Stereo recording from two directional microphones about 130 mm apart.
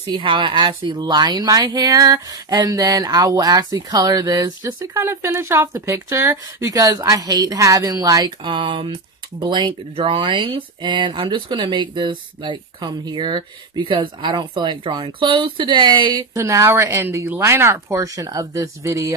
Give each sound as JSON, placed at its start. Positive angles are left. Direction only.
{"t": 0.1, "sound": "a woman's voice", "side_deg": -40}
{"t": 8.5, "sound": "speech", "side_deg": -40}
{"t": 16.3, "sound": "a woman's voice", "side_deg": -25}